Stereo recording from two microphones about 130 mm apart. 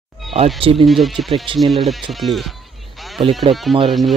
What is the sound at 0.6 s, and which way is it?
Speech, 45° right (ahead or behind).